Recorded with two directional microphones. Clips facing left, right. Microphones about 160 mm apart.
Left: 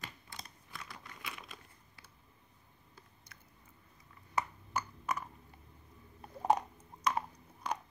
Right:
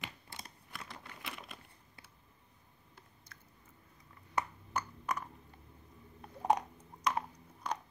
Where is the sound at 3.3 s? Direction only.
15° left (ahead or behind).